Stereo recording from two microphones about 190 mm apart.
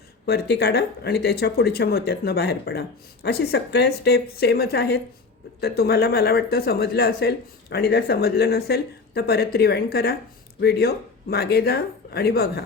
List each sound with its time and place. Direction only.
0.3 s speech: 60° left (ahead or behind)